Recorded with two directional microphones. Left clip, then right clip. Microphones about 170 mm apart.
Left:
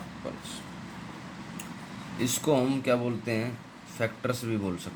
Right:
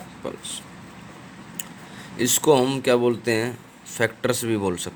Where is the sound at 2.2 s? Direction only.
60° right (ahead or behind).